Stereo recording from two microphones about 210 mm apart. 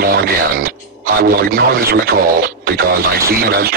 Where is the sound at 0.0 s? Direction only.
45° right (ahead or behind).